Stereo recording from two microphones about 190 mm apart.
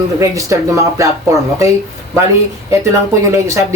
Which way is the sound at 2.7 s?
15° right (ahead or behind).